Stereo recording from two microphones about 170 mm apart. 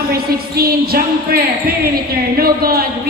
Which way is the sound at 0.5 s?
65° right (ahead or behind).